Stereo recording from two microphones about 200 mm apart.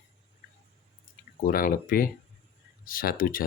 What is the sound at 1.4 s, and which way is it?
Speech, 45° left (ahead or behind).